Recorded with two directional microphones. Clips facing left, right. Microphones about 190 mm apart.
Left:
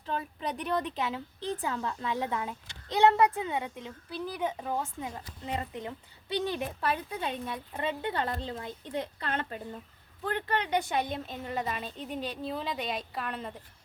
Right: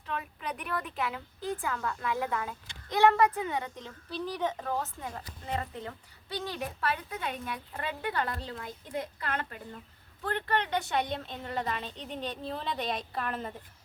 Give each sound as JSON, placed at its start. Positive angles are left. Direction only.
{"t": 0.1, "sound": "a woman's voice", "side_deg": 30}
{"t": 10.2, "sound": "a woman's voice", "side_deg": 15}